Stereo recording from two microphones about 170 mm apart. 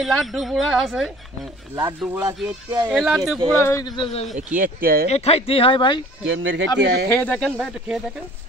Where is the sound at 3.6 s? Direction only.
20° left (ahead or behind).